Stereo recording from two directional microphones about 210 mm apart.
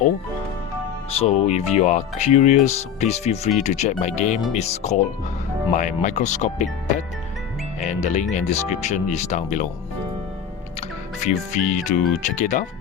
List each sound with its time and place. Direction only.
1.1 s speech: 30° left (ahead or behind)
7.9 s speech: 35° left (ahead or behind)
10.8 s speech: 35° left (ahead or behind)